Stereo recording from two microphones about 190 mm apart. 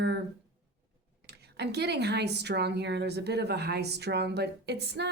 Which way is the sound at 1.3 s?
60° right (ahead or behind).